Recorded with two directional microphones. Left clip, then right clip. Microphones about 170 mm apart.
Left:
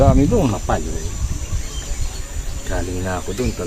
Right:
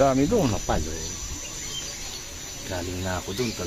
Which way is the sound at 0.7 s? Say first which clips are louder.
Left 6 dB; 25° right (ahead or behind).